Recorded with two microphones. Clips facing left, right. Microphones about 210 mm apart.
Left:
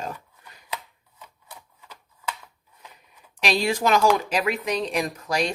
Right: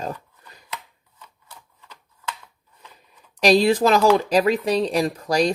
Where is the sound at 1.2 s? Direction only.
15° left (ahead or behind).